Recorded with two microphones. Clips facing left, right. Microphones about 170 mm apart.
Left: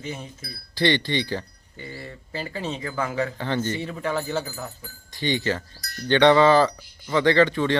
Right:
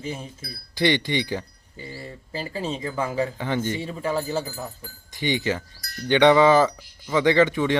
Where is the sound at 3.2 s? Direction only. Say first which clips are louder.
Even; 10° right (ahead or behind).